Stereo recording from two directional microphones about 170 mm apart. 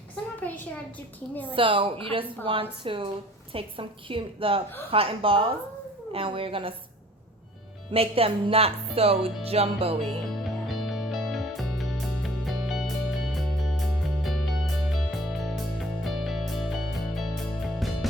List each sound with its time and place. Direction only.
1.5 s music: 30° right (ahead or behind)
7.9 s music: 35° right (ahead or behind)
10.0 s music: centre (ahead or behind)